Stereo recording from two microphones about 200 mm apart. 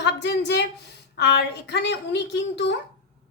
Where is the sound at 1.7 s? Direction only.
60° left (ahead or behind).